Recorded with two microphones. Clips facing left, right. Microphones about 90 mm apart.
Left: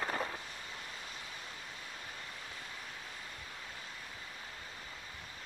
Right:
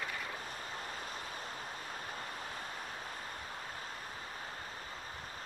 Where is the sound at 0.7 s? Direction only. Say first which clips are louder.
Right 4 dB; 45° right (ahead or behind).